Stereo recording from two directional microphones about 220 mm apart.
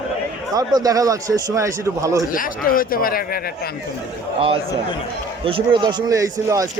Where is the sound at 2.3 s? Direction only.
40° left (ahead or behind).